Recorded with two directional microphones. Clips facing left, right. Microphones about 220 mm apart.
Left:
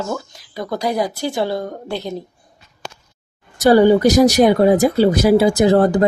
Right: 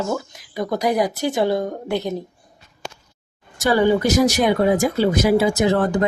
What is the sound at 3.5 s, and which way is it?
Speech, 40° left (ahead or behind).